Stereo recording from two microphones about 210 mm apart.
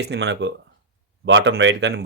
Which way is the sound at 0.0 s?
55° right (ahead or behind).